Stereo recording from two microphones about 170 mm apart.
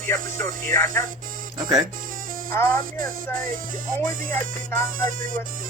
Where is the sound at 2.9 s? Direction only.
55° right (ahead or behind).